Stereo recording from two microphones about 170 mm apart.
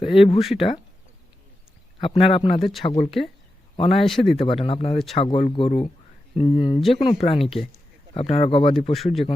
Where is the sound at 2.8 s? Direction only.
35° left (ahead or behind).